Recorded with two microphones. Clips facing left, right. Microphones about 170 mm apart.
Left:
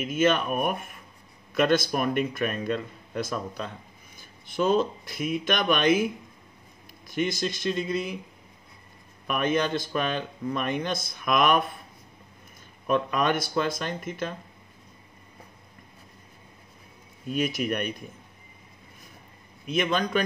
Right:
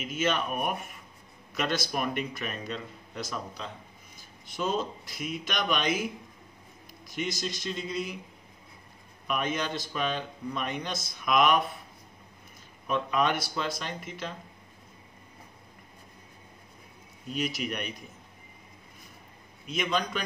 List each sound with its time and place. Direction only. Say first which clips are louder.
0.0 s speech: left 6 dB; 50° left (ahead or behind)
7.1 s speech: left 6 dB; 55° left (ahead or behind)
9.3 s speech: left 5 dB; 55° left (ahead or behind)
12.8 s speech: left 3 dB; 50° left (ahead or behind)
17.3 s speech: left 5 dB; 50° left (ahead or behind)
19.7 s speech: left 5 dB; 55° left (ahead or behind)